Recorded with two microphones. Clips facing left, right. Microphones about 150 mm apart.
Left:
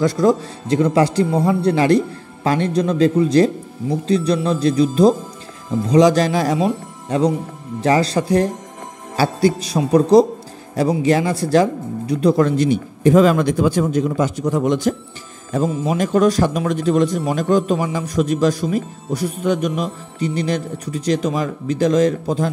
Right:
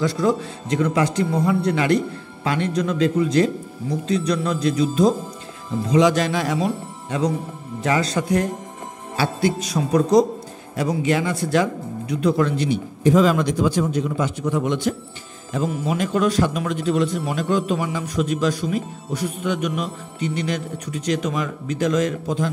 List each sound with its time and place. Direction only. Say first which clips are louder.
0.0 s speech: left 5 dB; 40° left (ahead or behind)